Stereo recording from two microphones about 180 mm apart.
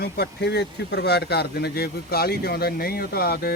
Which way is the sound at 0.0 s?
65° left (ahead or behind).